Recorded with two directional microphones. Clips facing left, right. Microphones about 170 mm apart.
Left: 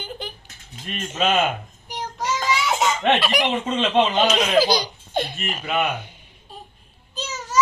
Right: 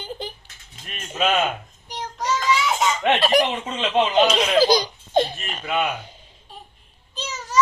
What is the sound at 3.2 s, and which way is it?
Speech, 40° right (ahead or behind).